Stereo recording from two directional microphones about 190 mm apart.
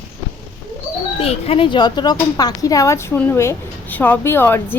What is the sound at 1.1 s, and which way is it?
A woman's voice, 30° left (ahead or behind).